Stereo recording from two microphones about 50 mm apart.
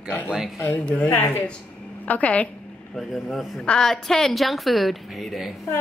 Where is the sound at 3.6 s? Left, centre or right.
Centre.